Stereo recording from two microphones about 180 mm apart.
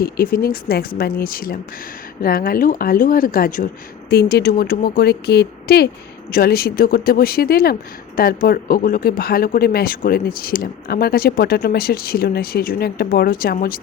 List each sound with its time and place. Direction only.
0.0 s speech: 55° left (ahead or behind)
4.1 s speech: 60° left (ahead or behind)